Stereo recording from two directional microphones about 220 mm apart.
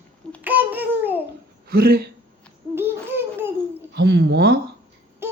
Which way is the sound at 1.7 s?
45° right (ahead or behind).